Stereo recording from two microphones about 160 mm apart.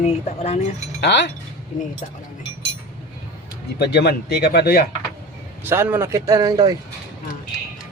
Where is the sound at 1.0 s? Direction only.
90° left.